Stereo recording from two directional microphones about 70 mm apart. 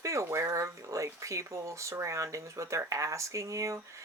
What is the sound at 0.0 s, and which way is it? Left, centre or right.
Speech, right.